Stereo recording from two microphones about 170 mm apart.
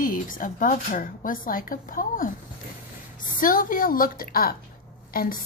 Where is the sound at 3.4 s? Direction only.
55° left (ahead or behind).